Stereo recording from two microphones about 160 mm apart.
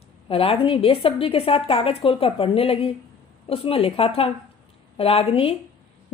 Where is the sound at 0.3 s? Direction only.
35° left (ahead or behind).